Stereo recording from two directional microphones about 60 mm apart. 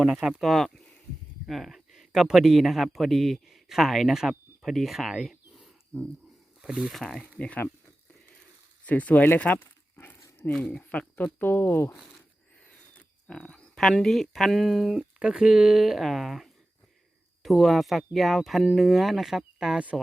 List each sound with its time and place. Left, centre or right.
0.0 s speech: centre
0.5 s a man's voice: centre
5.5 s wild animals: centre
6.6 s a sound: centre
6.9 s speech: centre
7.3 s speech: left
8.9 s a sound: left
10.7 s speech: left
11.4 s speech: left
13.0 s frog: centre
13.7 s speech: centre
15.2 s speech: centre